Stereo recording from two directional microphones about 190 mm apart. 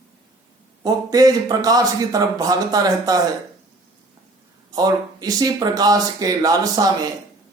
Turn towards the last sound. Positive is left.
turn(degrees=-20)  # may be behind; listen again after turning